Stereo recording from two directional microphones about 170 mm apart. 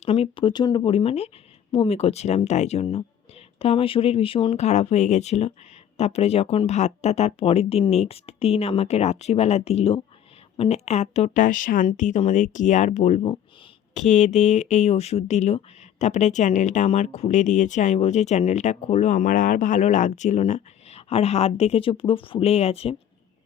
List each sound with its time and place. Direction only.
0.0 s speech: 35° left (ahead or behind)